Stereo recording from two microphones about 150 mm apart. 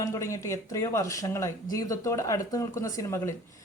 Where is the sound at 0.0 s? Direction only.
20° left (ahead or behind).